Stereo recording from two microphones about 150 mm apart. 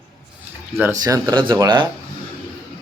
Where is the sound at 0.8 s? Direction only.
20° right (ahead or behind).